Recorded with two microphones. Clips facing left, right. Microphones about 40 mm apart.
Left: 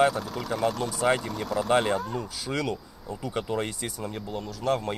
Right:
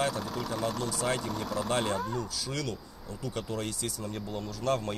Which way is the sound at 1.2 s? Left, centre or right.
Centre.